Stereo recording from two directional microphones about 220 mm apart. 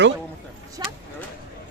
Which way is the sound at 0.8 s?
20° right (ahead or behind).